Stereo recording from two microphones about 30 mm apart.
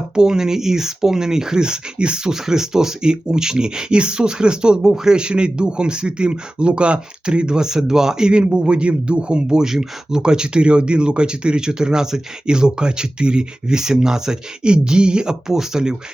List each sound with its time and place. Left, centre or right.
0.1 s speech: right
2.3 s speech: centre
4.9 s speech: centre
5.1 s speech: right
9.6 s speech: centre
14.6 s speech: right